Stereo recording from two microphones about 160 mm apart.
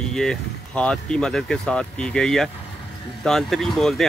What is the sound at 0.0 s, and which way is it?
Speech, 5° left (ahead or behind).